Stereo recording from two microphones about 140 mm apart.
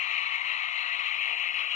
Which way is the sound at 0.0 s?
60° left (ahead or behind).